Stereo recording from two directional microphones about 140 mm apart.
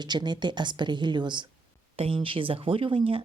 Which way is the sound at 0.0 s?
30° right (ahead or behind).